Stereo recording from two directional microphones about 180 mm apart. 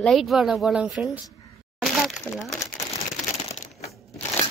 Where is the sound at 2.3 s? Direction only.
5° left (ahead or behind).